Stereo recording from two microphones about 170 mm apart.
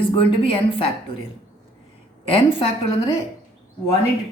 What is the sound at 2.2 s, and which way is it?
Speech, 35° left (ahead or behind).